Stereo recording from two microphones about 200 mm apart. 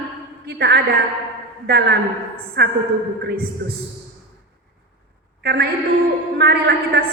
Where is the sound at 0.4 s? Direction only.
55° right (ahead or behind).